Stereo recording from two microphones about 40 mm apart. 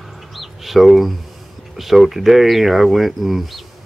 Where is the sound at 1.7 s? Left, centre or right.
Centre.